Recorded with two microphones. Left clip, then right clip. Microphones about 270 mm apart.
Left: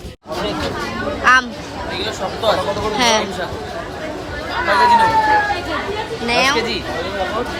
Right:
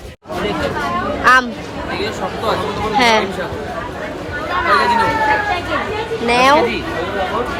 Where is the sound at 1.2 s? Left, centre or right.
Centre.